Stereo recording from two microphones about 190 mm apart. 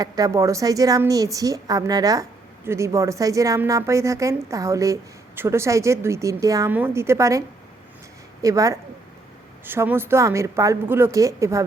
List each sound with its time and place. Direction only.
0.0 s a woman's voice: 15° right (ahead or behind)